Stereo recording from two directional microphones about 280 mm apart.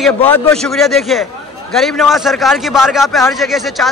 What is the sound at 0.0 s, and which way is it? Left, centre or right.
A man's voice, centre.